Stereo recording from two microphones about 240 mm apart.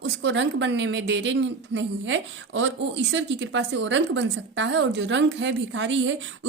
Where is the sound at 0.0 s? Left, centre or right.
Right.